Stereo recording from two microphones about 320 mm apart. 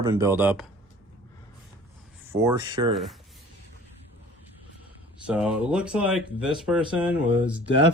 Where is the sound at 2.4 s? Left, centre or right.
Centre.